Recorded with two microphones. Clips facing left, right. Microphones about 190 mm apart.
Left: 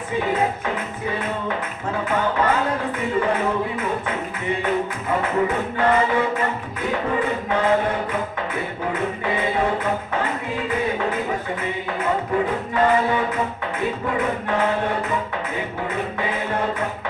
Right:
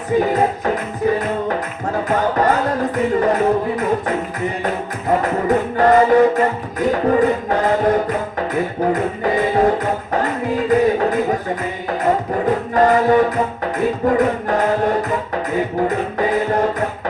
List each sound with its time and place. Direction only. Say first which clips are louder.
0.2 s music: right 3 dB; 40° right (ahead or behind)
5.2 s music: right 4 dB; 40° right (ahead or behind)
12.7 s music: right 6 dB; 40° right (ahead or behind)
15.9 s music: right 7 dB; 40° right (ahead or behind)